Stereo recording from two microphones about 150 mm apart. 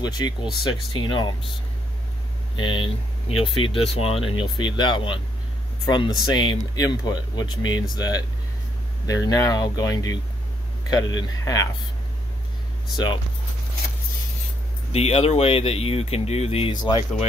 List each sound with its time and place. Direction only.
0.0 s speech: 30° left (ahead or behind)
2.5 s speech: 35° left (ahead or behind)
12.9 s speech: 30° left (ahead or behind)
14.9 s speech: 45° left (ahead or behind)